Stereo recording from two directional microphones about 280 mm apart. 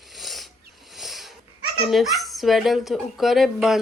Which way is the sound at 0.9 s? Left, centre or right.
Centre.